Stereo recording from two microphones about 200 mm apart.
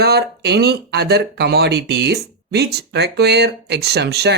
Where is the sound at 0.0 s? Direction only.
55° right (ahead or behind).